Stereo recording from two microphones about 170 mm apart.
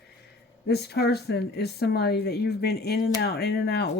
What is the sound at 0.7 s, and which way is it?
Speech, 75° left (ahead or behind).